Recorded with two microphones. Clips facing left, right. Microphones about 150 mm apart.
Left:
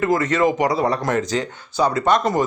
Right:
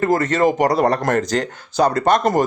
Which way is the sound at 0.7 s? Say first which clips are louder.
Right 3 dB; 70° right (ahead or behind).